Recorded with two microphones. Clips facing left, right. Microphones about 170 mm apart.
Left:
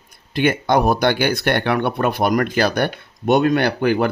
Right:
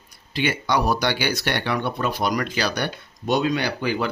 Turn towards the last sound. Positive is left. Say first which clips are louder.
# left 7 dB
turn(degrees=55)  # may be behind; listen again after turning